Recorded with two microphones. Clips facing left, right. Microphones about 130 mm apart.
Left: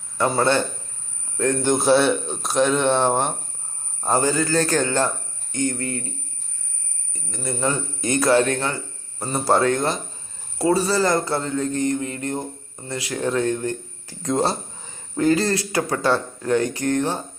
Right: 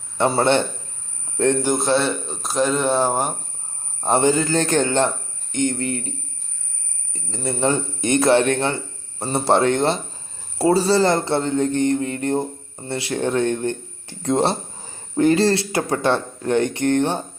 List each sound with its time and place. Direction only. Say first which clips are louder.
0.2 s speech: right 2 dB; 30° right (ahead or behind)
1.6 s speech: left 2 dB; centre (ahead or behind)
4.0 s speech: right 3 dB; 25° right (ahead or behind)